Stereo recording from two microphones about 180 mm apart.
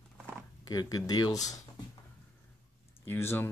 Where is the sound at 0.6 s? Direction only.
20° left (ahead or behind).